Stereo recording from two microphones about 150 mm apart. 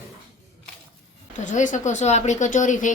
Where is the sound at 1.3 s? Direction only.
55° left (ahead or behind).